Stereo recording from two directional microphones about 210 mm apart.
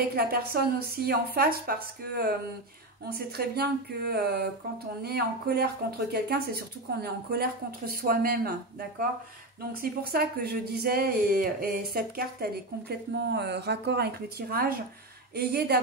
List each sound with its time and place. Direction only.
0.1 s speech: 45° right (ahead or behind)
3.3 s speech: 50° right (ahead or behind)